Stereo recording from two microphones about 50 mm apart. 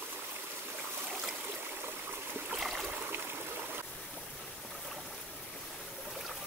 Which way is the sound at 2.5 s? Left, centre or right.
Centre.